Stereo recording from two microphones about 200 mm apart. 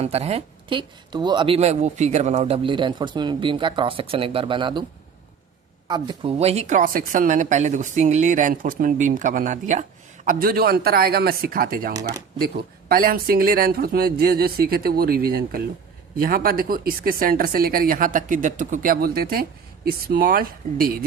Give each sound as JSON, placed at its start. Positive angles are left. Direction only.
{"t": 0.0, "sound": "speech", "side_deg": -30}
{"t": 5.9, "sound": "speech", "side_deg": -25}